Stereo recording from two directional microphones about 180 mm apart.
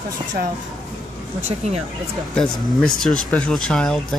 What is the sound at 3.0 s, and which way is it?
Speech, 5° left (ahead or behind).